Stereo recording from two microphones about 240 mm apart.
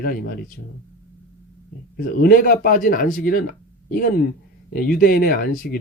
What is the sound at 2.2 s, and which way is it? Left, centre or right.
A man's voice, left.